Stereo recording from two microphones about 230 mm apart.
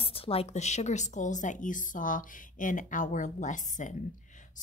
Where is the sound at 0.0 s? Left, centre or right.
Left.